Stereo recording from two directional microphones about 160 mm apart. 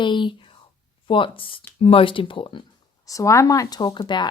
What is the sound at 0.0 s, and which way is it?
Speech, 30° left (ahead or behind).